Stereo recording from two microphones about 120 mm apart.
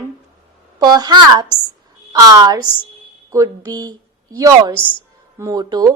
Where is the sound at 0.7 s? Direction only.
30° right (ahead or behind).